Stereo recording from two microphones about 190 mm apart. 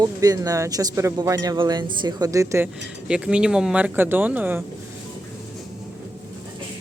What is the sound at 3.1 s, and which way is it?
Speech, 5° right (ahead or behind).